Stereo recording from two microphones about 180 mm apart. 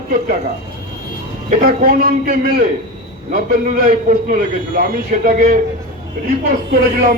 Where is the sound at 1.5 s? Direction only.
50° right (ahead or behind).